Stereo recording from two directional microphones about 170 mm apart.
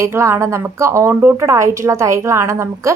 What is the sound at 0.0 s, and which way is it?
Speech, 15° right (ahead or behind).